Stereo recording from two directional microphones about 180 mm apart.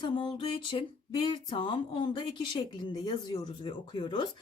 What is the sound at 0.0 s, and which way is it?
Speech, 25° left (ahead or behind).